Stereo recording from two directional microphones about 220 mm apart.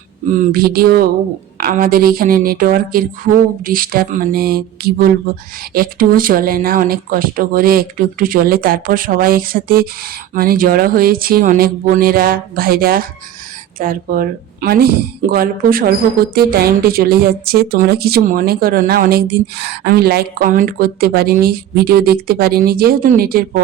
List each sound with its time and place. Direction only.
0.3 s a woman's voice: 40° right (ahead or behind)